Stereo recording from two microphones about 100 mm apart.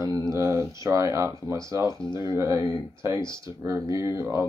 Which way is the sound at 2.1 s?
45° left (ahead or behind).